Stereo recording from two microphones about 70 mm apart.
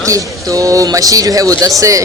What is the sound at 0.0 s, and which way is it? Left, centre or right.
Speech, right.